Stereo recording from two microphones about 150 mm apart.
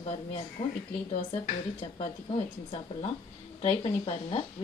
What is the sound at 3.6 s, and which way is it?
Speech, 40° left (ahead or behind).